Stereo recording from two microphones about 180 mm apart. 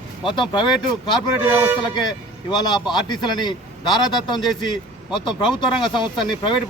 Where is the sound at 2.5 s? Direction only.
25° left (ahead or behind).